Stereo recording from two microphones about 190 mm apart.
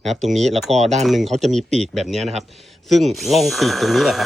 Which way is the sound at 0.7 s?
35° right (ahead or behind).